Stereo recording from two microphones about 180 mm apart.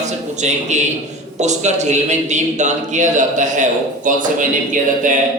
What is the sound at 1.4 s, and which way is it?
A man's voice, 40° right (ahead or behind).